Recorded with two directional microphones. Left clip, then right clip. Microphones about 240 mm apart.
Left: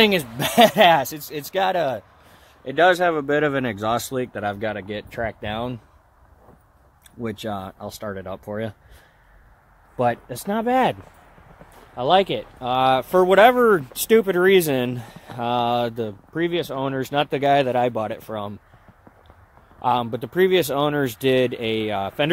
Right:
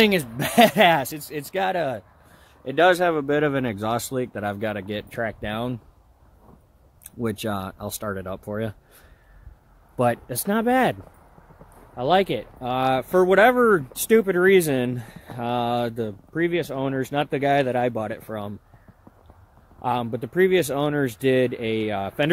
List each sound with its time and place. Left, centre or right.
0.0 s speech: centre
2.6 s speech: centre
7.2 s speech: right
9.9 s speech: centre
11.9 s speech: centre
19.8 s speech: centre